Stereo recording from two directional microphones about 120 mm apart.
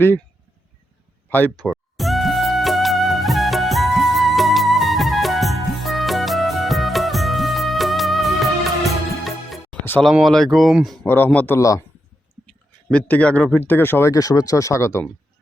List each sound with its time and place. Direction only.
1.3 s speech: 15° left (ahead or behind)
1.6 s music: centre (ahead or behind)
10.0 s speech: centre (ahead or behind)
11.0 s speech: 20° left (ahead or behind)
12.5 s a man's voice: 10° left (ahead or behind)